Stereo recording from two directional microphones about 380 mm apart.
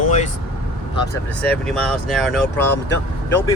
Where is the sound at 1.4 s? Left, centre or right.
Centre.